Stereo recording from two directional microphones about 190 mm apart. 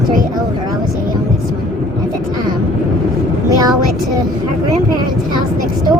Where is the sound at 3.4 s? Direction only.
20° right (ahead or behind).